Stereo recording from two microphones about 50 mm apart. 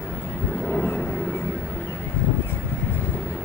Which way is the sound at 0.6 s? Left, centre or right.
Left.